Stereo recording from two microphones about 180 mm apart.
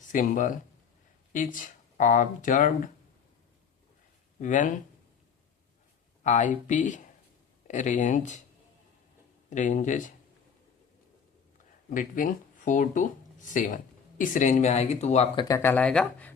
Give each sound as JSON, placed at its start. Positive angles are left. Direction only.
{"t": 0.1, "sound": "speech", "side_deg": 45}
{"t": 4.4, "sound": "speech", "side_deg": 45}
{"t": 6.2, "sound": "speech", "side_deg": 45}
{"t": 9.5, "sound": "speech", "side_deg": 45}
{"t": 11.9, "sound": "speech", "side_deg": 50}
{"t": 15.4, "sound": "speech", "side_deg": 15}